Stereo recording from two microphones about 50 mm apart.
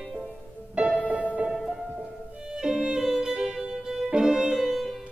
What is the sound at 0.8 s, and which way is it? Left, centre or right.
Music, right.